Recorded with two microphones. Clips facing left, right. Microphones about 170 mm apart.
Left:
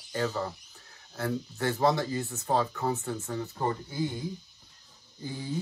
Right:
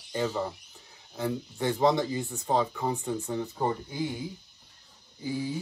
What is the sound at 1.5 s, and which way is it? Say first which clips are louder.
Speech: right 2 dB; 15° right (ahead or behind).